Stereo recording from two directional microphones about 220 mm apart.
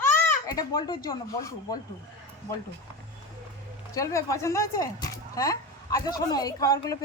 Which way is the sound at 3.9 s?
15° left (ahead or behind).